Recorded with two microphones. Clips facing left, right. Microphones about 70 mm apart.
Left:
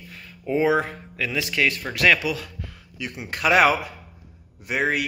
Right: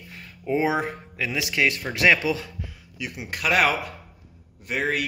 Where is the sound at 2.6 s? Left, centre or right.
Centre.